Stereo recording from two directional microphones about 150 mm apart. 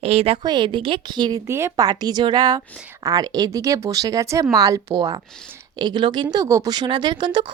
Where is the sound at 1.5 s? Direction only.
15° right (ahead or behind).